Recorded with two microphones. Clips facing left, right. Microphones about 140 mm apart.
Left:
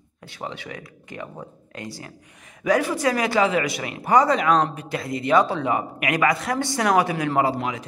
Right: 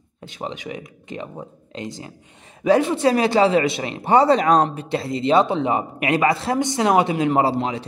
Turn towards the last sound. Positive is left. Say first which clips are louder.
# right 3 dB
turn(degrees=-30)  # may be behind; listen again after turning